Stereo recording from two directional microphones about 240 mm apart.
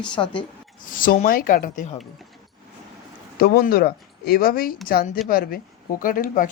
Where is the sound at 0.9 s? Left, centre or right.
Left.